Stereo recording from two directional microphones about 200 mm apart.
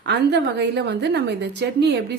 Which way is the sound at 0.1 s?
60° right (ahead or behind).